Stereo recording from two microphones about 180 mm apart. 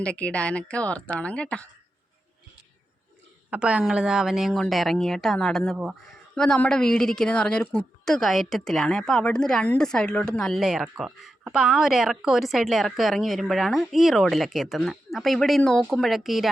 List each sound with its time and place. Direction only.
0.0 s a woman's voice: 5° left (ahead or behind)
3.5 s a woman's voice: 5° right (ahead or behind)